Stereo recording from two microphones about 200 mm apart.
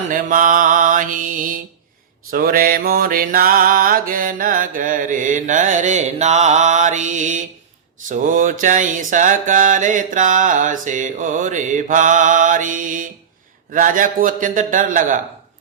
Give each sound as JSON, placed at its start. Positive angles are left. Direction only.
{"t": 0.1, "sound": "mantra", "side_deg": -40}